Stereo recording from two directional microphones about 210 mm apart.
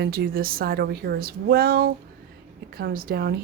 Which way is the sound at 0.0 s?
45° right (ahead or behind).